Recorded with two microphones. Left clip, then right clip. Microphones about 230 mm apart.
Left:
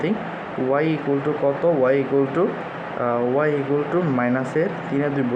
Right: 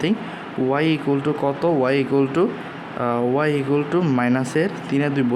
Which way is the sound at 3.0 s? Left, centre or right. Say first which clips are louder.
Even; right.